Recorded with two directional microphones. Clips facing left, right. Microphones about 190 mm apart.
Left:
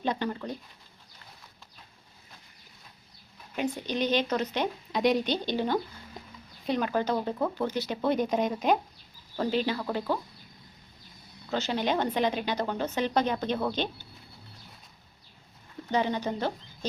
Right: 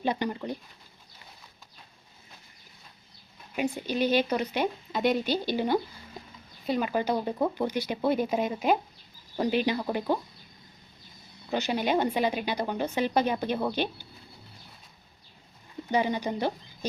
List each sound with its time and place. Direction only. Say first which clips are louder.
0.0 s speech: right 1 dB; 10° right (ahead or behind)
3.5 s speech: right 1 dB; 10° right (ahead or behind)
11.5 s speech: right 2 dB; 15° right (ahead or behind)
15.9 s speech: right 1 dB; 10° right (ahead or behind)